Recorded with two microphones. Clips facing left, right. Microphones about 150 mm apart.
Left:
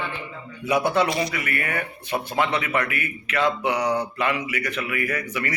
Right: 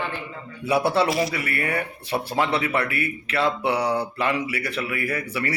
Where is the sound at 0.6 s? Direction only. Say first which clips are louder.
Even; 30° right (ahead or behind).